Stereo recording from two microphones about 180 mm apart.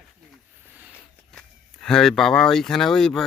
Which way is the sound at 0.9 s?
5° left (ahead or behind).